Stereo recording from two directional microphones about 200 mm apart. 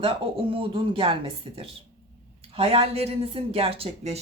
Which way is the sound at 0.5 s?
25° right (ahead or behind).